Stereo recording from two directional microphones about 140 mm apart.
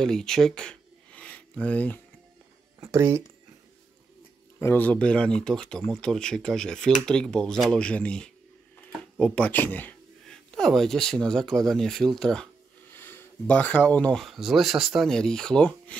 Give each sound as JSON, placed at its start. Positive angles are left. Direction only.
{"t": 0.0, "sound": "a sound", "side_deg": 5}
{"t": 2.8, "sound": "speech", "side_deg": -20}
{"t": 4.6, "sound": "speech", "side_deg": 15}
{"t": 12.9, "sound": "speech", "side_deg": 15}